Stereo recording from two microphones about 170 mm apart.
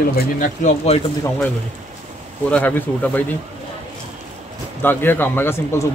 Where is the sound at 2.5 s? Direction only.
10° left (ahead or behind).